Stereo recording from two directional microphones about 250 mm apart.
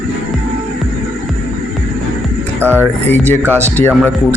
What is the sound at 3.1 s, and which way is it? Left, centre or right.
Speech, centre.